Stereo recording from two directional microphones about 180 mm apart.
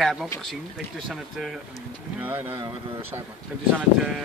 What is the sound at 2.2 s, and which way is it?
Speech, 10° right (ahead or behind).